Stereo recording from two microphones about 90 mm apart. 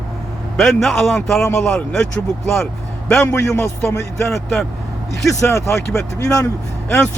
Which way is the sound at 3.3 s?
30° left (ahead or behind).